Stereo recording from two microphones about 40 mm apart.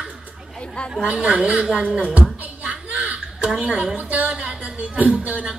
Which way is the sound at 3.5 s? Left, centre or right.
Right.